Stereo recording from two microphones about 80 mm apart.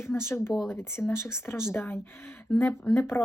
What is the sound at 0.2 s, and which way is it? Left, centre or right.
A woman's voice, left.